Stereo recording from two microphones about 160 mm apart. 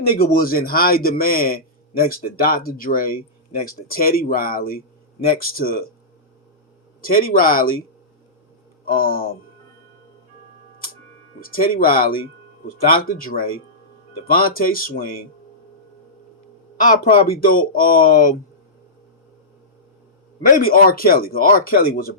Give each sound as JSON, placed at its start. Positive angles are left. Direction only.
{"t": 0.2, "sound": "a man's voice", "side_deg": 65}
{"t": 7.0, "sound": "a man's voice", "side_deg": 65}
{"t": 8.8, "sound": "speech", "side_deg": 65}
{"t": 11.3, "sound": "a man's voice", "side_deg": 65}
{"t": 16.8, "sound": "a man's voice", "side_deg": 55}
{"t": 20.6, "sound": "speech", "side_deg": 65}